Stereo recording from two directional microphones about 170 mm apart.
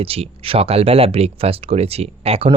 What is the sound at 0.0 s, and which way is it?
Speech, 35° right (ahead or behind).